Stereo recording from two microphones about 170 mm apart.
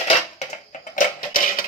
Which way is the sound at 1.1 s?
55° left (ahead or behind).